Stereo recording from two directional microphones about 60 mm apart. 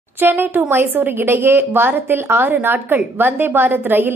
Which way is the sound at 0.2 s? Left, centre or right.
Right.